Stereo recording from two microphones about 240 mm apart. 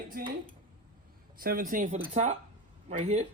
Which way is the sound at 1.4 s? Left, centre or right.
Right.